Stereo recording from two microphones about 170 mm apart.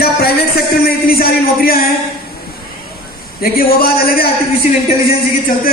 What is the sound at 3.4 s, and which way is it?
Speech, 60° left (ahead or behind).